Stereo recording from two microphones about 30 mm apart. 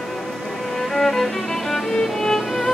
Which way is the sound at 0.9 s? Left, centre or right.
Centre.